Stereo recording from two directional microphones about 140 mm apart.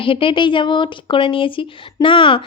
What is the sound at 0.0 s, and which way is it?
Speech, 40° left (ahead or behind).